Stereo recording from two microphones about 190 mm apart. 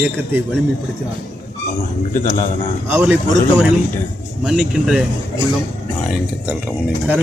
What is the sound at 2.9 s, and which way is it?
Speech, 10° right (ahead or behind).